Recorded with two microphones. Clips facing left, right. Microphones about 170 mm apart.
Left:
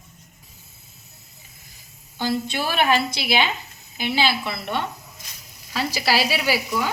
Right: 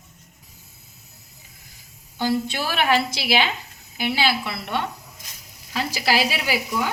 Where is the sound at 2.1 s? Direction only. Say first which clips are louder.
Right 2 dB; 10° right (ahead or behind).